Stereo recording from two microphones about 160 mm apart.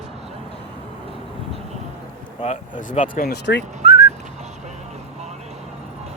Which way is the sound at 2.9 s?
60° left (ahead or behind).